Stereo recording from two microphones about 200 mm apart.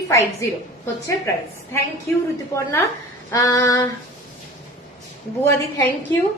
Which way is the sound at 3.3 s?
15° left (ahead or behind).